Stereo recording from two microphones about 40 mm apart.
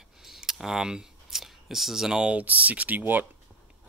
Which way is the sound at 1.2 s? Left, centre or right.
Centre.